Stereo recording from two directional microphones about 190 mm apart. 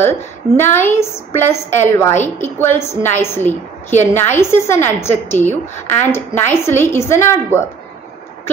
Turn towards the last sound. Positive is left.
turn(degrees=15)  # may be behind; listen again after turning